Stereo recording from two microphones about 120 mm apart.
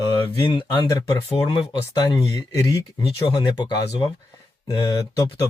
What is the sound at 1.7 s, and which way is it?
Speech, 35° left (ahead or behind).